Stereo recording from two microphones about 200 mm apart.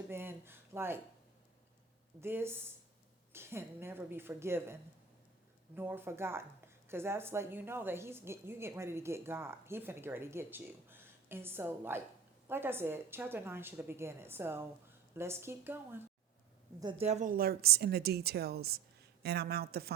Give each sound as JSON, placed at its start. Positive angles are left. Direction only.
{"t": 0.1, "sound": "speech", "side_deg": -10}
{"t": 2.2, "sound": "a woman's voice", "side_deg": -10}
{"t": 16.8, "sound": "a woman's voice", "side_deg": -30}